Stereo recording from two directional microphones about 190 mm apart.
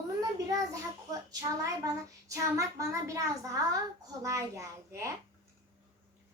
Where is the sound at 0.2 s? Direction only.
20° right (ahead or behind).